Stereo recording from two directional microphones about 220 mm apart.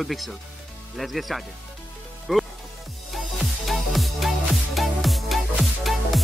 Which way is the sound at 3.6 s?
Centre (ahead or behind).